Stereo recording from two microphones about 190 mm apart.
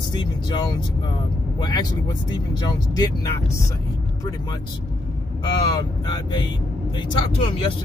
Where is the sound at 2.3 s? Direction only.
20° left (ahead or behind).